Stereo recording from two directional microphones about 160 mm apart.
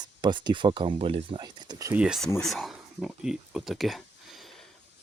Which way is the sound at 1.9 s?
5° right (ahead or behind).